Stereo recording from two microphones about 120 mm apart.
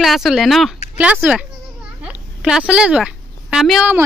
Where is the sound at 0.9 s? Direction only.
10° right (ahead or behind).